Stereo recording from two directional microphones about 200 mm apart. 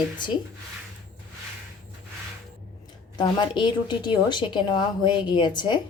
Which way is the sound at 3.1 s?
25° left (ahead or behind).